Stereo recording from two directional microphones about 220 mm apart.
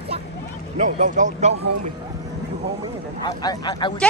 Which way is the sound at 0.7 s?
35° right (ahead or behind).